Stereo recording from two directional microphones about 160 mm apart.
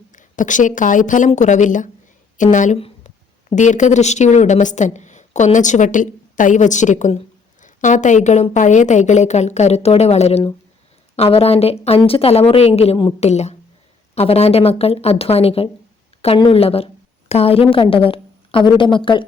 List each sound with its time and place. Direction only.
0.1 s a woman's voice: 55° left (ahead or behind); by 19.2 s 30° left (ahead or behind)